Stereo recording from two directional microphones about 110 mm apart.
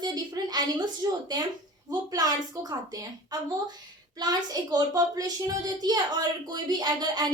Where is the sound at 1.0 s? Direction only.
35° right (ahead or behind).